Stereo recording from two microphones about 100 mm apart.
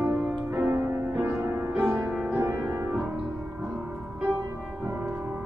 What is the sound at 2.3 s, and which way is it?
Music, 30° right (ahead or behind).